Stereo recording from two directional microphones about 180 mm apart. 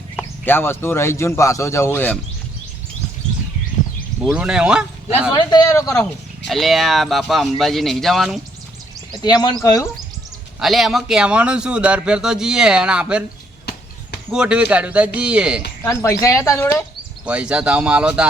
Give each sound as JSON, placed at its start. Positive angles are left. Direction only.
{"t": 0.2, "sound": "speech", "side_deg": 10}
{"t": 4.2, "sound": "a man's voice", "side_deg": 0}
{"t": 5.3, "sound": "speech", "side_deg": 25}
{"t": 6.5, "sound": "a man's voice", "side_deg": 0}
{"t": 9.2, "sound": "speech", "side_deg": 25}
{"t": 10.6, "sound": "a man's voice", "side_deg": 0}
{"t": 14.3, "sound": "speech", "side_deg": -5}
{"t": 15.8, "sound": "speech", "side_deg": 15}
{"t": 17.2, "sound": "a man's voice", "side_deg": -5}